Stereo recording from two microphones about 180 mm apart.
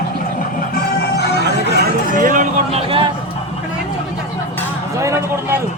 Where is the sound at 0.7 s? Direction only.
60° left (ahead or behind).